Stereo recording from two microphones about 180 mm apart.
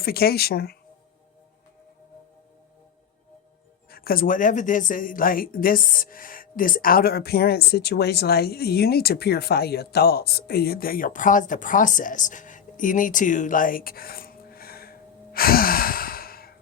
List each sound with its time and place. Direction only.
0.0 s speech: 60° left (ahead or behind)
3.8 s speech: 55° left (ahead or behind)